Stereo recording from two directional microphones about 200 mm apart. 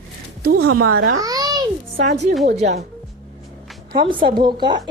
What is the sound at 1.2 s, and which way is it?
Babbling, 20° right (ahead or behind).